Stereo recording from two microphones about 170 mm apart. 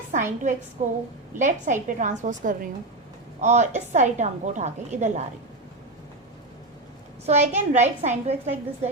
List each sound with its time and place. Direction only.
0.1 s a woman's voice: 50° right (ahead or behind)
7.3 s a woman's voice: 40° right (ahead or behind)